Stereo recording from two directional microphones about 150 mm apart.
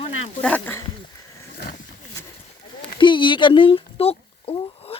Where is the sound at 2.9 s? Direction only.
30° left (ahead or behind).